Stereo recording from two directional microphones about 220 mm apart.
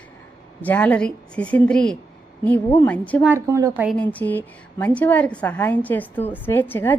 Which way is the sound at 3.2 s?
10° right (ahead or behind).